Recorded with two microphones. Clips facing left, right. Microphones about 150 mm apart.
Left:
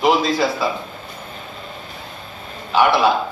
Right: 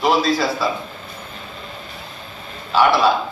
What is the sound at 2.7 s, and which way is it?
Speech, 15° left (ahead or behind).